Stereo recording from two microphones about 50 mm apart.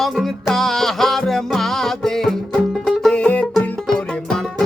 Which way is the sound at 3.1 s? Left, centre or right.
Left.